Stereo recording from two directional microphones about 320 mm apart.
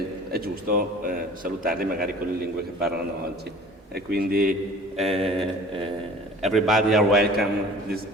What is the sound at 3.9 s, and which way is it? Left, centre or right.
Speech, right.